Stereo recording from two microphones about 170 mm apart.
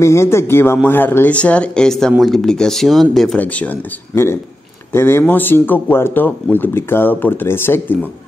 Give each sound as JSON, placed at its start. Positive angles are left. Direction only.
{"t": 0.0, "sound": "speech", "side_deg": 15}